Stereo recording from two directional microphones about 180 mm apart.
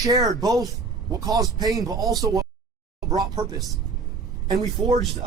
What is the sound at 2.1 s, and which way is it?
Speech, 20° right (ahead or behind).